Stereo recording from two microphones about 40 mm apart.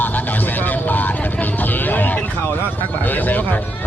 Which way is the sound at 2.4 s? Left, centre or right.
Left.